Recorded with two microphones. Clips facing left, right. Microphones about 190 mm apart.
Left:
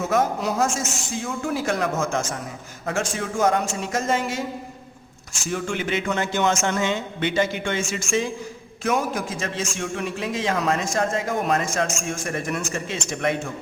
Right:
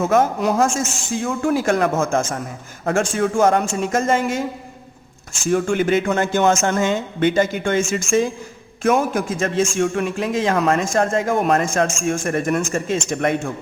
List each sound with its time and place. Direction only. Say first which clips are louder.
0.0 s a man's voice: right 5 dB; 50° right (ahead or behind)
5.5 s a man's voice: right 8 dB; 50° right (ahead or behind)